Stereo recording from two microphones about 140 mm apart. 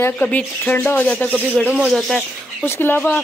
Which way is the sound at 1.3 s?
10° right (ahead or behind).